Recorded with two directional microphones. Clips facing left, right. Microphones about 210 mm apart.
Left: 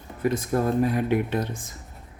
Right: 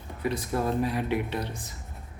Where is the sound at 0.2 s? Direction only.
45° left (ahead or behind).